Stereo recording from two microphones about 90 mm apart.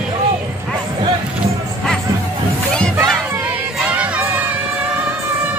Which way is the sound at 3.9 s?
15° right (ahead or behind).